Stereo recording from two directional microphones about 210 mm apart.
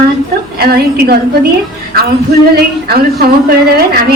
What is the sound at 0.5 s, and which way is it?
Speech, 45° right (ahead or behind).